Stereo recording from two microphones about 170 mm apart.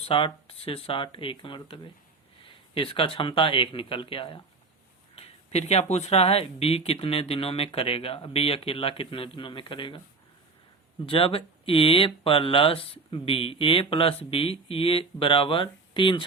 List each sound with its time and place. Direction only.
0.0 s speech: 30° left (ahead or behind)
11.0 s speech: 30° left (ahead or behind)